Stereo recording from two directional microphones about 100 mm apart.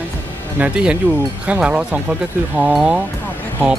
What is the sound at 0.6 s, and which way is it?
Speech, 10° right (ahead or behind).